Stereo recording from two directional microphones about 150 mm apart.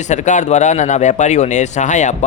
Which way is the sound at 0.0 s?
50° left (ahead or behind).